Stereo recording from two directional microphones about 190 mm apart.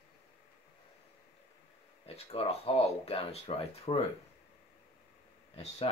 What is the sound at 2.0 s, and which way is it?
Speech, 30° left (ahead or behind).